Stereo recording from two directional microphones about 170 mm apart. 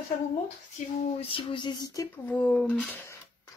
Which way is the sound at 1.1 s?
35° left (ahead or behind).